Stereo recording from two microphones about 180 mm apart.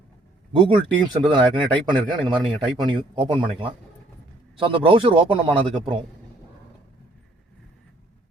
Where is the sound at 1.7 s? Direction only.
25° right (ahead or behind).